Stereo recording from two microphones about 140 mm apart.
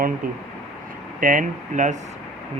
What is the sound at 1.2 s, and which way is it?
Speech, 70° right (ahead or behind).